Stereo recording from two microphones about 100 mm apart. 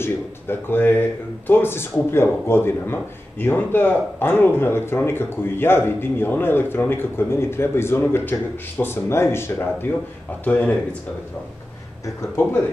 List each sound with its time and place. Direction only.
0.0 s a man's voice: 20° left (ahead or behind)